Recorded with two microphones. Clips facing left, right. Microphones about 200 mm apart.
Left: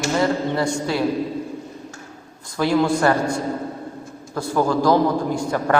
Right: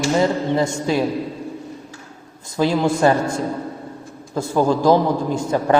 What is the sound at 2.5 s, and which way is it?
A man's voice, 20° right (ahead or behind).